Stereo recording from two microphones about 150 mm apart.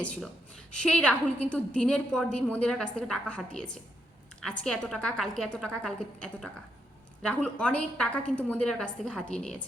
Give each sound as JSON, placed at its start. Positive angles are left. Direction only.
{"t": 0.8, "sound": "a woman's voice", "side_deg": 5}